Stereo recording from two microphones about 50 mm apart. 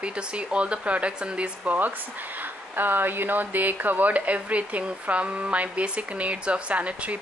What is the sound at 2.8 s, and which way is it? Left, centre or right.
A woman's voice, right.